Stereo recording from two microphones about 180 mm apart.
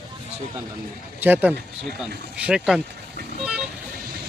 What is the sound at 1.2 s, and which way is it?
Speech, 10° right (ahead or behind).